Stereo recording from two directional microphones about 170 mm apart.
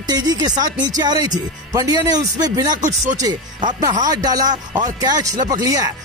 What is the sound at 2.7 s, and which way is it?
Speech, 45° right (ahead or behind).